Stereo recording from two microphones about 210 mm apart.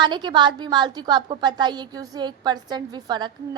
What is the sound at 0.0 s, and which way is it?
A woman's voice, 20° right (ahead or behind).